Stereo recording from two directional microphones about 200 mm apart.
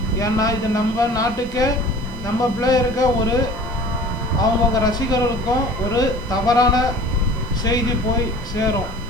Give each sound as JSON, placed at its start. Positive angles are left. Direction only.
{"t": 0.2, "sound": "speech", "side_deg": 20}